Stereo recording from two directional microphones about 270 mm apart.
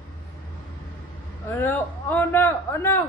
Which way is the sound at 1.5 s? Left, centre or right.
Centre.